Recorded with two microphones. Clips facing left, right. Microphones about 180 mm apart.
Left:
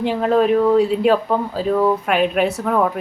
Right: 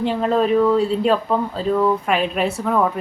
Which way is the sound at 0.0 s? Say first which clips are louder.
Left 2 dB; 5° left (ahead or behind).